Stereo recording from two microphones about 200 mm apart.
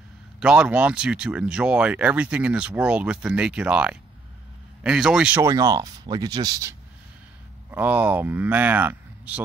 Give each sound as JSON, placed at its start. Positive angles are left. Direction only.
{"t": 0.4, "sound": "speech", "side_deg": -5}
{"t": 7.7, "sound": "speech", "side_deg": -10}